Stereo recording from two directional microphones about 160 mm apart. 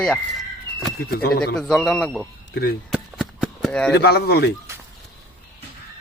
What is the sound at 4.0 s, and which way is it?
Speech, 85° left.